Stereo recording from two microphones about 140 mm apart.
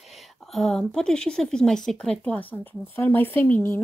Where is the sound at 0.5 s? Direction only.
5° left (ahead or behind).